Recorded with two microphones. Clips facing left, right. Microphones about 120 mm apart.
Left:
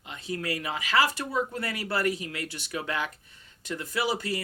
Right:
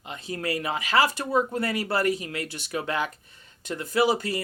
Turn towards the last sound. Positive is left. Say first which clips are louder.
# right 6 dB
turn(degrees=-25)  # may be behind; listen again after turning